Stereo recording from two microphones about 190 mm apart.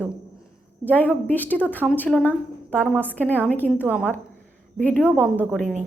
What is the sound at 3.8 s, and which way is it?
Speech, 5° right (ahead or behind).